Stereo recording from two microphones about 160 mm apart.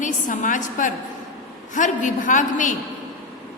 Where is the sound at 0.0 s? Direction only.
55° left (ahead or behind).